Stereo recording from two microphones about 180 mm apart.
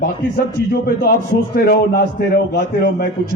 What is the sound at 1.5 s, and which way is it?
A man's voice, 60° left (ahead or behind).